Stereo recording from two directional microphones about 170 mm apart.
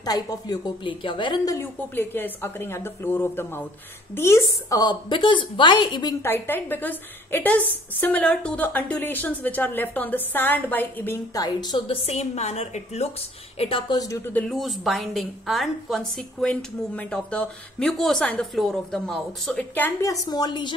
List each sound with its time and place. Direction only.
0.0 s a woman's voice: 20° left (ahead or behind)
6.2 s a woman's voice: 15° left (ahead or behind)
11.3 s a woman's voice: 25° left (ahead or behind)
14.4 s a woman's voice: centre (ahead or behind); by 20.7 s 25° left (ahead or behind)